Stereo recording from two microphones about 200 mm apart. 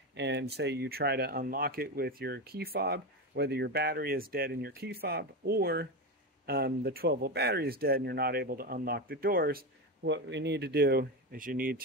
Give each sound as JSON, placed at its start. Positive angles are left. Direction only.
{"t": 0.1, "sound": "speech", "side_deg": -60}